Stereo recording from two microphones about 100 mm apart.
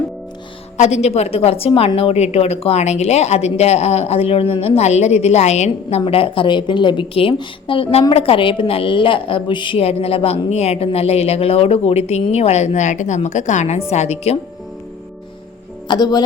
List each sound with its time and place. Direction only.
0.9 s a woman's voice: 90° left
6.1 s a woman's voice: 65° left (ahead or behind)
9.7 s speech: 85° left
13.9 s speech: 90° left
15.9 s speech: 40° left (ahead or behind)